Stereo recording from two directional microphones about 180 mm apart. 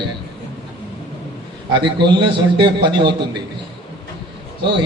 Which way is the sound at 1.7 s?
25° right (ahead or behind).